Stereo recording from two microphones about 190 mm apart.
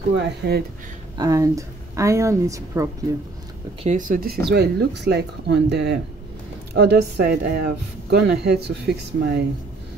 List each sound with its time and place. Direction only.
0.1 s speech: 60° right (ahead or behind)
1.1 s speech: 20° right (ahead or behind)
3.8 s speech: 45° right (ahead or behind)